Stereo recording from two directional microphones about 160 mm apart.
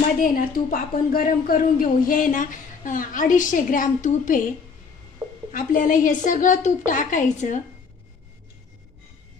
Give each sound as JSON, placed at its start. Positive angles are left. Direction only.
{"t": 0.2, "sound": "speech", "side_deg": 65}
{"t": 5.5, "sound": "a woman's voice", "side_deg": 55}